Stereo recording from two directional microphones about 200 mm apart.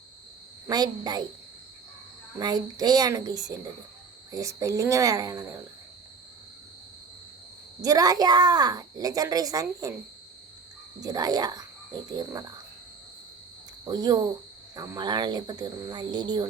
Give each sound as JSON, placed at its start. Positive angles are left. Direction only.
{"t": 0.7, "sound": "a woman's voice", "side_deg": -20}
{"t": 2.4, "sound": "a woman's voice", "side_deg": -20}
{"t": 7.8, "sound": "a woman's voice", "side_deg": -20}
{"t": 11.0, "sound": "speech", "side_deg": -20}
{"t": 13.8, "sound": "a woman's voice", "side_deg": -20}